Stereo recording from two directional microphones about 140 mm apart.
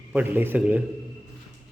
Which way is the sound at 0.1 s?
15° right (ahead or behind).